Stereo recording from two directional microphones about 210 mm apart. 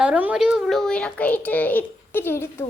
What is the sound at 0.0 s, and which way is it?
A child's voice, 5° right (ahead or behind).